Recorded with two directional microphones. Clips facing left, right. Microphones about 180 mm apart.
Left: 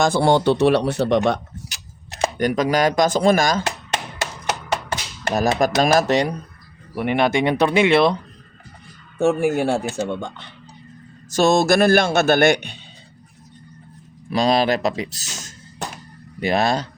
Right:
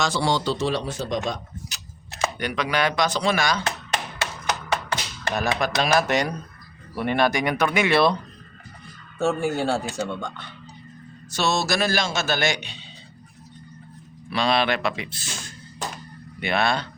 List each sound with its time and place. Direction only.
0.0 s a man's voice: 55° left (ahead or behind)
2.2 s chopping: 45° left (ahead or behind)
5.3 s speech: 40° left (ahead or behind)
6.9 s speech: 15° left (ahead or behind)
9.1 s speech: 15° left (ahead or behind)
11.3 s a man's voice: 50° left (ahead or behind)
14.3 s speech: 40° left (ahead or behind)
15.8 s a sound: 60° left (ahead or behind)
16.4 s speech: 40° left (ahead or behind)